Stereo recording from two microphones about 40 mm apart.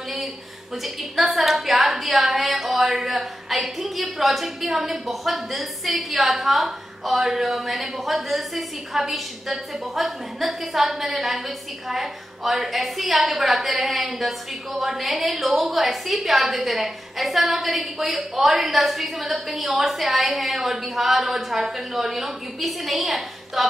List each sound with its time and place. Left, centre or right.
0.8 s speech: centre